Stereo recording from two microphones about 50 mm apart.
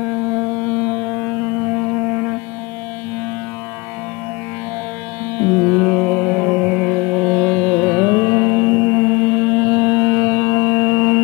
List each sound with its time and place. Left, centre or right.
2.0 s music: right
5.4 s music: right
5.8 s music: centre
8.0 s music: right